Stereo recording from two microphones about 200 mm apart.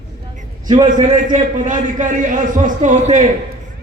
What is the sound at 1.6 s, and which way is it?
A man's voice, 40° right (ahead or behind).